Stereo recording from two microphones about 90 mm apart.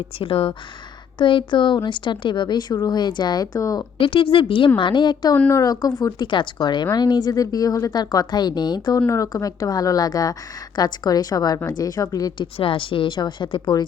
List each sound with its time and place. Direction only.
0.2 s speech: 85° left
1.2 s speech: 65° left (ahead or behind); by 3.8 s 45° left (ahead or behind)
3.9 s a woman's voice: 75° left (ahead or behind)
4.8 s speech: 65° left (ahead or behind)
5.6 s speech: 40° left (ahead or behind)
6.1 s a woman's voice: 60° left (ahead or behind)
9.0 s a woman's voice: 35° left (ahead or behind)
12.4 s speech: 80° left; by 13.8 s 60° left (ahead or behind)